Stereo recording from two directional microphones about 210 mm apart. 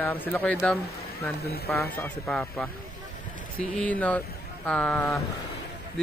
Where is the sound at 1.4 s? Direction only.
50° left (ahead or behind).